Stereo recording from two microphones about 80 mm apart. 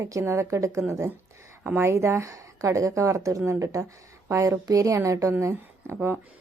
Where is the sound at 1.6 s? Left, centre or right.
Right.